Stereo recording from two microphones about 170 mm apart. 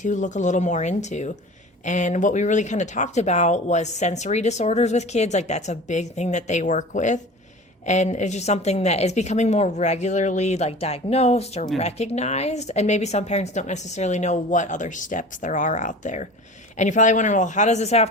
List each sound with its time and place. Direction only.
0.0 s a woman's voice: 45° left (ahead or behind)